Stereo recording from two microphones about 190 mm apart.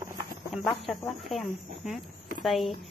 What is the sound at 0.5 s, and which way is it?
Speech, centre (ahead or behind).